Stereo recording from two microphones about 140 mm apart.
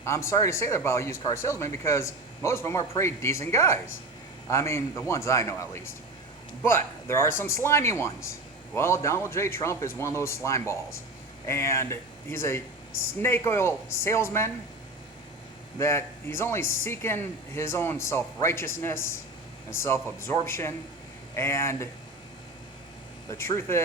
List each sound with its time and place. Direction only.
0.0 s speech: 20° left (ahead or behind)
15.8 s speech: 20° left (ahead or behind)
23.3 s speech: 20° left (ahead or behind)